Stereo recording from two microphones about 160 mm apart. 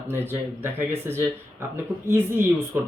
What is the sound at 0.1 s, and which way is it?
Speech, 15° right (ahead or behind).